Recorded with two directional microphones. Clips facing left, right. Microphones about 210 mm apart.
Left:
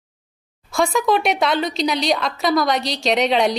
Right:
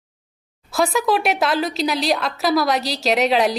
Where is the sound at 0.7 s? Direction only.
5° right (ahead or behind).